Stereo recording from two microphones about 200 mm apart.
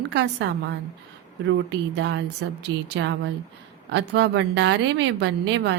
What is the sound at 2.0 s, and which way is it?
A woman's voice, 60° right (ahead or behind).